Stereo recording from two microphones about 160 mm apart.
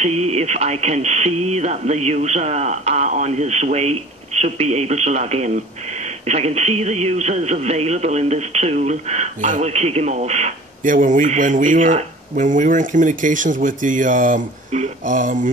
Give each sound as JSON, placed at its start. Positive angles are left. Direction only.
{"t": 0.0, "sound": "speech", "side_deg": -40}